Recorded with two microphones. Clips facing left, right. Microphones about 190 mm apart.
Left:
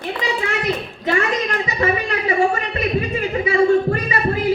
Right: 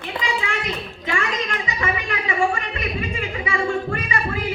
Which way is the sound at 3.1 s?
40° left (ahead or behind).